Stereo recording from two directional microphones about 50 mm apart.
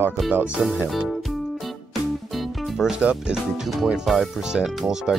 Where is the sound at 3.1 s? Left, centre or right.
Centre.